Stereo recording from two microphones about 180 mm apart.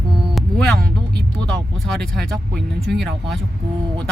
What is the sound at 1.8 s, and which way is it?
Speech, centre (ahead or behind).